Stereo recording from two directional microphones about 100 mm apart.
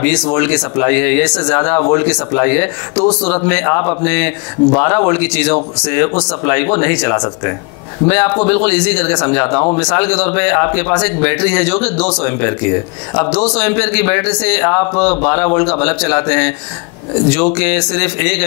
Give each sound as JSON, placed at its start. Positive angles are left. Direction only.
{"t": 0.0, "sound": "speech", "side_deg": 15}